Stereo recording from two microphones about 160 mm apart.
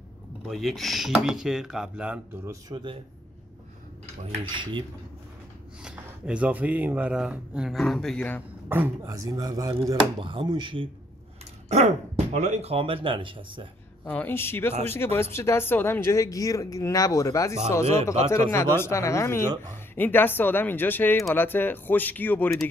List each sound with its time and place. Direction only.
0.5 s speech: centre (ahead or behind)
2.5 s speech: 30° right (ahead or behind)
4.3 s speech: 30° right (ahead or behind)
5.8 s speech: 5° right (ahead or behind)
8.6 s speech: 15° right (ahead or behind); by 10.9 s 30° right (ahead or behind)
11.7 s speech: 45° right (ahead or behind)
14.0 s speech: 10° left (ahead or behind)